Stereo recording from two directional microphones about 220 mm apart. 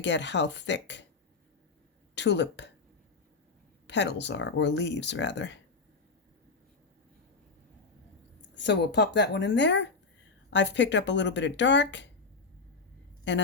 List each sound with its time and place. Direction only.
0.0 s speech: 55° left (ahead or behind)
2.1 s speech: 50° left (ahead or behind)
3.8 s speech: 55° left (ahead or behind)
8.4 s speech: 50° left (ahead or behind)
13.3 s speech: 55° left (ahead or behind)